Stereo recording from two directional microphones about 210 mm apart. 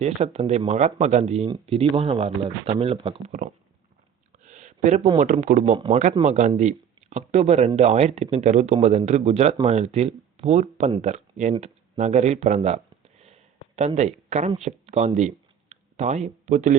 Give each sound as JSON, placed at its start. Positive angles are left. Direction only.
{"t": 0.0, "sound": "speech", "side_deg": -30}
{"t": 4.4, "sound": "speech", "side_deg": -40}